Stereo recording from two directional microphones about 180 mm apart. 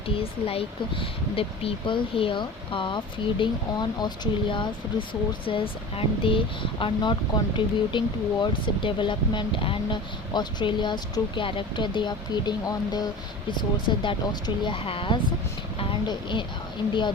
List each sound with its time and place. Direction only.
0.2 s speech: 30° left (ahead or behind)